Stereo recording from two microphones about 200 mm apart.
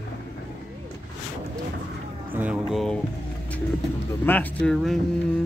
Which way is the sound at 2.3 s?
5° right (ahead or behind).